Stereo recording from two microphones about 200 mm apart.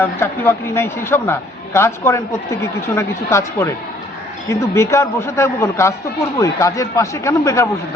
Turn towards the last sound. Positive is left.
turn(degrees=15)  # may be behind; listen again after turning